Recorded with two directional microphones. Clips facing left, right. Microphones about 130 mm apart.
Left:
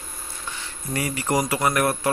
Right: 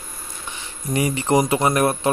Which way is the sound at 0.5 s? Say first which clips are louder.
Right 5 dB; 20° right (ahead or behind).